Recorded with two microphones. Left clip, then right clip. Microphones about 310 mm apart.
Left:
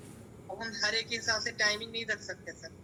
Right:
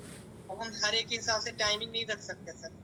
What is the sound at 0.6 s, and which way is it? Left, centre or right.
A woman's voice, centre.